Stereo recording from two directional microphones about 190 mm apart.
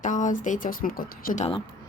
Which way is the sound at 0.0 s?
40° left (ahead or behind).